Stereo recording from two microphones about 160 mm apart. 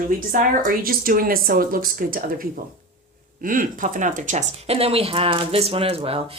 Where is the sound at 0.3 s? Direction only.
60° right (ahead or behind).